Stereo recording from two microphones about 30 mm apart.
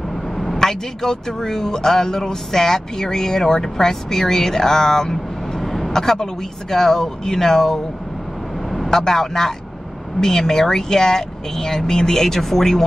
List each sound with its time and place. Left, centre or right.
0.1 s speech: centre
5.6 s vehicle: centre
5.9 s speech: centre
8.6 s vehicle: centre
8.9 s speech: centre